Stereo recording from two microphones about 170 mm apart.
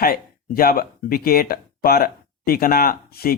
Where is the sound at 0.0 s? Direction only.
60° left (ahead or behind).